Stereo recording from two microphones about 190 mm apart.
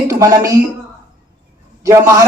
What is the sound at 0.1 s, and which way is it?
Speech, 15° right (ahead or behind).